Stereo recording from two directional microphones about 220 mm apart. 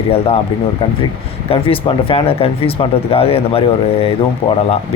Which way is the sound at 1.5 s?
25° left (ahead or behind).